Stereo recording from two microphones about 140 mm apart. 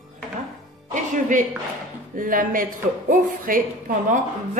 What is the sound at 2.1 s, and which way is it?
Speech, 75° right (ahead or behind).